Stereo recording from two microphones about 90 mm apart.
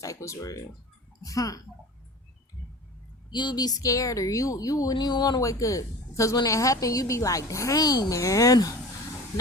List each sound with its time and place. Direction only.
0.0 s a woman's voice: 35° left (ahead or behind)
3.2 s a woman's voice: 55° left (ahead or behind)
4.9 s speech: 55° left (ahead or behind)
5.4 s a woman's voice: 40° left (ahead or behind)
9.3 s a sound: 40° left (ahead or behind)